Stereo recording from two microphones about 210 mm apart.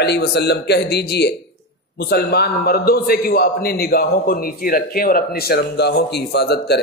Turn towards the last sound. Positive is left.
turn(degrees=50)  # may be behind; listen again after turning